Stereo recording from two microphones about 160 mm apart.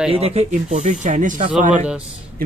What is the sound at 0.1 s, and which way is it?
Speech, 40° right (ahead or behind).